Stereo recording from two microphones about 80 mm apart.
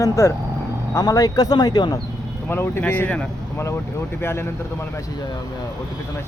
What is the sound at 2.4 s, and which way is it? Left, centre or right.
Speech, left.